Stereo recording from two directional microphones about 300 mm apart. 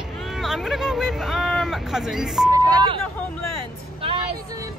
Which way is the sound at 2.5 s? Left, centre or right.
Centre.